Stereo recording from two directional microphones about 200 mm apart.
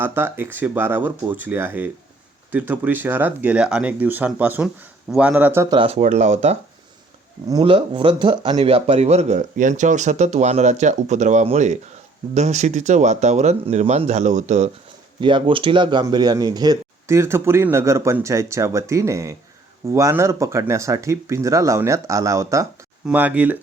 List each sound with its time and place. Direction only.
0.0 s speech: 10° right (ahead or behind)
5.7 s speech: 30° right (ahead or behind)
15.2 s speech: 25° right (ahead or behind); by 23.6 s 10° right (ahead or behind)